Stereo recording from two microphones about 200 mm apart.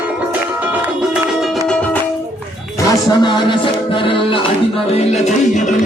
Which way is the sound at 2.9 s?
20° left (ahead or behind).